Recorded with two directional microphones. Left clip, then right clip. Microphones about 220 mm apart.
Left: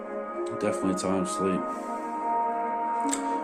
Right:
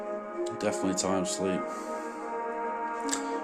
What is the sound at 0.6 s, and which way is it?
Speech, 20° right (ahead or behind).